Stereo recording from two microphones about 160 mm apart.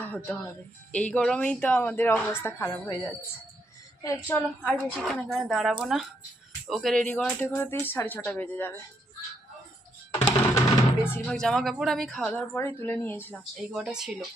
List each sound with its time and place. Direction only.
0.0 s a woman's voice: 10° left (ahead or behind)
4.9 s speech: centre (ahead or behind)
10.2 s music: 15° left (ahead or behind)
11.3 s speech: 5° left (ahead or behind)
13.6 s speech: 5° right (ahead or behind)